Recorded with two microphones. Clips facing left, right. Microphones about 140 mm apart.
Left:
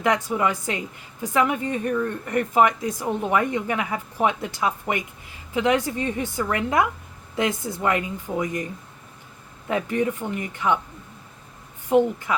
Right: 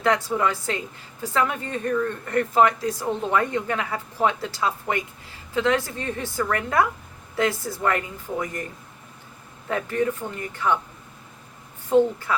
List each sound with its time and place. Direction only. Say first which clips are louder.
0.0 s speech: even; 15° left (ahead or behind)
9.6 s speech: left 1 dB; 15° left (ahead or behind)
11.9 s speech: even; 15° left (ahead or behind)